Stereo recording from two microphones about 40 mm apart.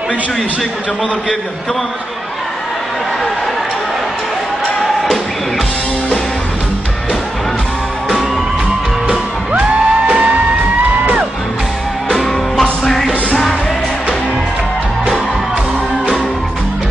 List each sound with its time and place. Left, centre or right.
9.0 s music: right
12.1 s music: centre